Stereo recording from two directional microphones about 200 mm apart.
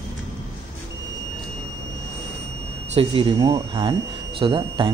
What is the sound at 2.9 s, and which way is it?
Speech, 25° right (ahead or behind).